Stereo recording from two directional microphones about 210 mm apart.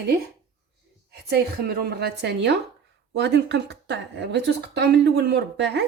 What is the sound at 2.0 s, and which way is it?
A woman's voice, 50° right (ahead or behind).